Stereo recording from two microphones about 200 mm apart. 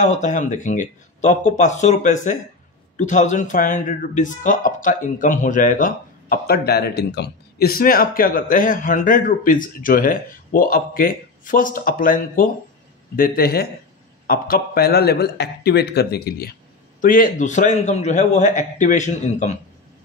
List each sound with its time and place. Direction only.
0.0 s a man's voice: 35° left (ahead or behind)